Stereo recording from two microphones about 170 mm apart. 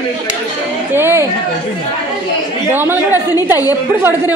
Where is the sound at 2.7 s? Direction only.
10° right (ahead or behind).